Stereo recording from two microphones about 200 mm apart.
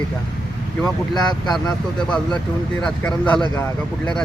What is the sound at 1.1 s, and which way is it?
Speech, 20° left (ahead or behind).